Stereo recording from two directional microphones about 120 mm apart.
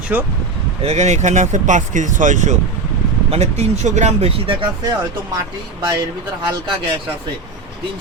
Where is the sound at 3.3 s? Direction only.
65° right (ahead or behind).